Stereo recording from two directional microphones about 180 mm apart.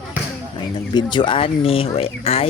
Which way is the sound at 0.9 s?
25° left (ahead or behind).